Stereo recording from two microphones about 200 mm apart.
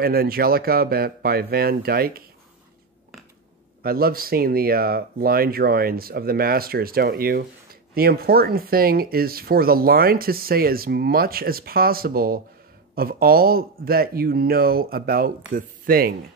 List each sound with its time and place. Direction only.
0.0 s speech: 50° right (ahead or behind)
3.8 s speech: 50° right (ahead or behind)